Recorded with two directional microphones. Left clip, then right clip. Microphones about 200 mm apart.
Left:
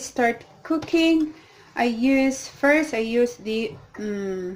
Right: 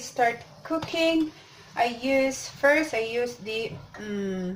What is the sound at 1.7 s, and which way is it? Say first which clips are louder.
Speech: left 2 dB; 60° left (ahead or behind).